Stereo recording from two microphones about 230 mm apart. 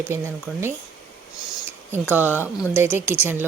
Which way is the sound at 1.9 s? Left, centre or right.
Centre.